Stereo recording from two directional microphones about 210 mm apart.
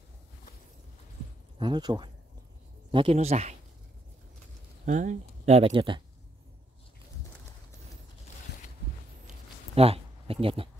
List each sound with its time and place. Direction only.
1.6 s speech: 20° right (ahead or behind)
4.8 s speech: 35° right (ahead or behind)
9.8 s speech: 25° right (ahead or behind)